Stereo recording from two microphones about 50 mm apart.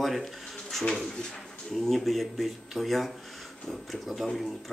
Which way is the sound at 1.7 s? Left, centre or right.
Centre.